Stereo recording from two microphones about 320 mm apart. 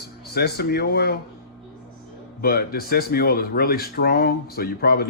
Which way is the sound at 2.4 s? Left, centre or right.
Left.